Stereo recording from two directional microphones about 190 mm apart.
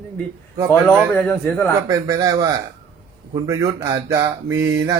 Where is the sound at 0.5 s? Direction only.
15° right (ahead or behind).